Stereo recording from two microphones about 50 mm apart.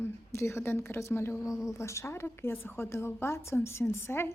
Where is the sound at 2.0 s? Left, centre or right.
Left.